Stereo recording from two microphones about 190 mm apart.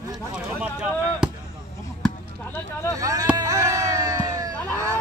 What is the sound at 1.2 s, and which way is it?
Basketball bounce, 5° right (ahead or behind).